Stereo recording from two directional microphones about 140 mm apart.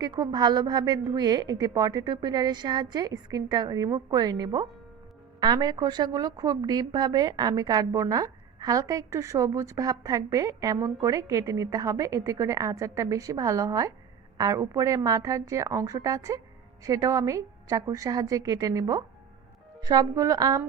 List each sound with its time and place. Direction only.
0.0 s a woman's voice: 30° right (ahead or behind)